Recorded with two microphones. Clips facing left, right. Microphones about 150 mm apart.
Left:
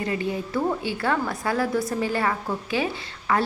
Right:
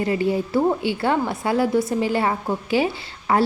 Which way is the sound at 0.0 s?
30° right (ahead or behind).